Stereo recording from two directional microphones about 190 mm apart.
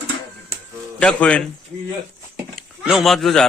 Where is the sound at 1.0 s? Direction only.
5° left (ahead or behind).